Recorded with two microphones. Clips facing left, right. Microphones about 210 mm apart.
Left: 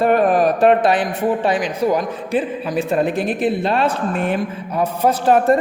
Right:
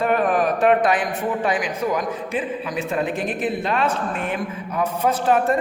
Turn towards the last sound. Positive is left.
turn(degrees=35)  # may be behind; listen again after turning